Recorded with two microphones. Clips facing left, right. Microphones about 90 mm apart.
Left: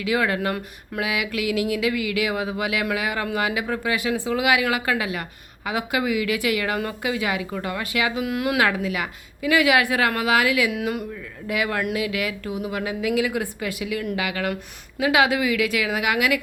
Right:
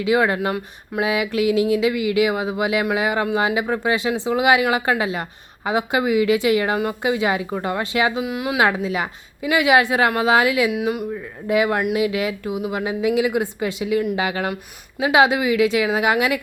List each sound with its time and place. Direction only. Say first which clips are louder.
0.0 s a man's voice: right 4 dB; 25° right (ahead or behind)
8.2 s speech: even; 5° right (ahead or behind)
8.5 s a man's voice: right 6 dB; 25° right (ahead or behind)
10.7 s speech: right 4 dB; 5° right (ahead or behind)
11.1 s a man's voice: right 7 dB; 25° right (ahead or behind)